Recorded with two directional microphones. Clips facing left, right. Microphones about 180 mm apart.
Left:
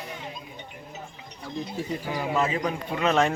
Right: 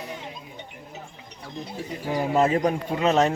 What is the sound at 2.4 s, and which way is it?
Speech, 45° right (ahead or behind).